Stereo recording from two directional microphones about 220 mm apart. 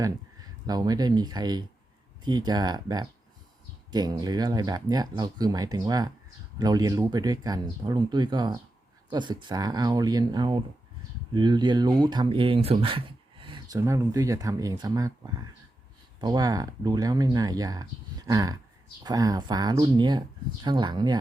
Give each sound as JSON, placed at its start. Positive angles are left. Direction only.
{"t": 0.7, "sound": "speech", "side_deg": -15}
{"t": 16.2, "sound": "speech", "side_deg": -15}